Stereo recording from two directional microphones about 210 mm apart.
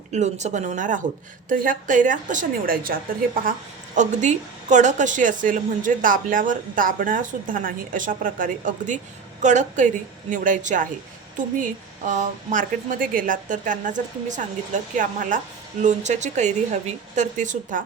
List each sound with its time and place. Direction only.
0.1 s a woman's voice: 35° right (ahead or behind)